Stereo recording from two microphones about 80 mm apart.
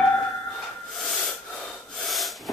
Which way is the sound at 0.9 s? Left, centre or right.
Centre.